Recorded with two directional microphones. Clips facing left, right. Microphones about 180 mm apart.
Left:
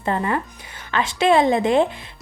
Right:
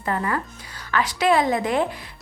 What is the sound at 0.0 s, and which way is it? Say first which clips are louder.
A woman's voice: left 3 dB; 25° left (ahead or behind).